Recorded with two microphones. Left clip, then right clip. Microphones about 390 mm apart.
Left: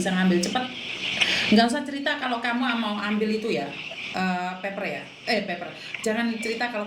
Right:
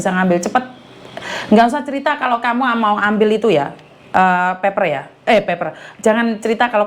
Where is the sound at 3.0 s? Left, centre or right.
Right.